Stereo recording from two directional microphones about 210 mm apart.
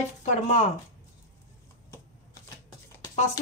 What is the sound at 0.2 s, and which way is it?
Speech, 35° left (ahead or behind).